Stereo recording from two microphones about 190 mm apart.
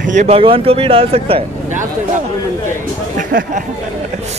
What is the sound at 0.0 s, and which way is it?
Speech, 40° right (ahead or behind).